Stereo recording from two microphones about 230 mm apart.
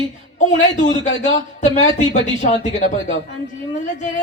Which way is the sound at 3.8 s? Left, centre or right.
Left.